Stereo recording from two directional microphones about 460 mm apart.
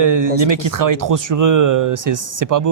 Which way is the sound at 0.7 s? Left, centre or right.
Right.